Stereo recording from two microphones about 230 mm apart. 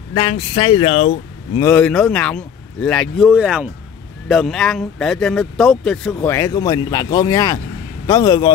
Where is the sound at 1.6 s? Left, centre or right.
Centre.